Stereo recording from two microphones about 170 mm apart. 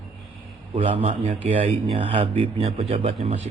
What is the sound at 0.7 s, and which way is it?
A man's voice, 40° right (ahead or behind).